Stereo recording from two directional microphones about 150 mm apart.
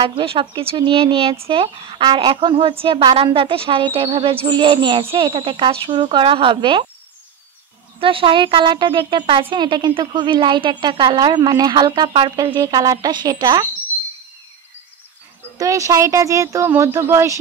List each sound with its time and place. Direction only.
0.0 s a woman's voice: 35° right (ahead or behind)
8.0 s a woman's voice: 35° right (ahead or behind)
15.5 s speech: 20° right (ahead or behind)